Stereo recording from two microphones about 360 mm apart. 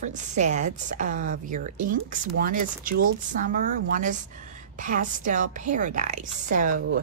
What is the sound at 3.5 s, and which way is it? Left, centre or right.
Speech, right.